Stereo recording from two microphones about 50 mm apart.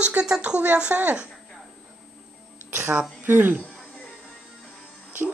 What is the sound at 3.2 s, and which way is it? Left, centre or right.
Speech, right.